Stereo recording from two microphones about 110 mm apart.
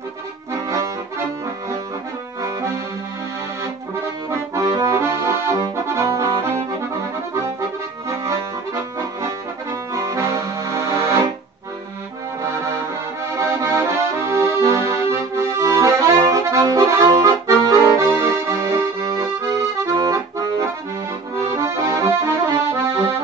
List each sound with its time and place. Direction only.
4.6 s accordion: 30° right (ahead or behind)
8.1 s accordion: 25° right (ahead or behind)
9.9 s music: 30° right (ahead or behind)
13.4 s accordion: 25° right (ahead or behind)